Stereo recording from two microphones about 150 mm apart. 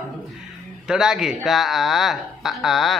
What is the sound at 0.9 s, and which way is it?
Speech, 5° right (ahead or behind).